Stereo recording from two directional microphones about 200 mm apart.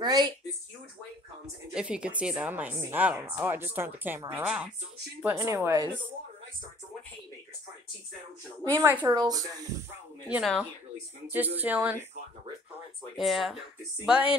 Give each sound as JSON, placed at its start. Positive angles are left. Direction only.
{"t": 0.0, "sound": "speech", "side_deg": -20}
{"t": 1.7, "sound": "a woman's voice", "side_deg": -5}
{"t": 8.6, "sound": "a woman's voice", "side_deg": -15}
{"t": 10.2, "sound": "a woman's voice", "side_deg": -5}
{"t": 13.2, "sound": "speech", "side_deg": 0}